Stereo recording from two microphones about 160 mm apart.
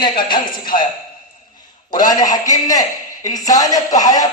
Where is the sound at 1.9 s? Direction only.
25° left (ahead or behind).